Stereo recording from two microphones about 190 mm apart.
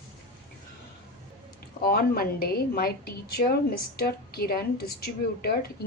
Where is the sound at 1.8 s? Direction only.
50° left (ahead or behind).